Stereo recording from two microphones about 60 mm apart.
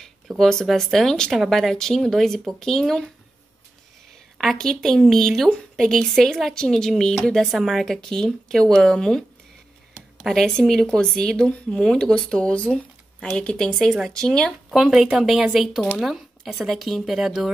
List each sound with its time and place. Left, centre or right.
0.4 s speech: centre
4.4 s speech: centre
10.2 s speech: centre
14.7 s speech: centre